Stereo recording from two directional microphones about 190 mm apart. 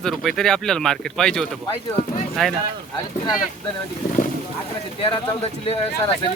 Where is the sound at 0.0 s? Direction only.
Centre (ahead or behind).